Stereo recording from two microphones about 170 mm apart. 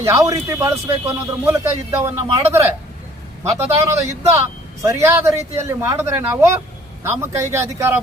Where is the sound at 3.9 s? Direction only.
15° right (ahead or behind).